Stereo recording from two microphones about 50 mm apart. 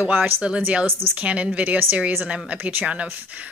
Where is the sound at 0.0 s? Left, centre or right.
Right.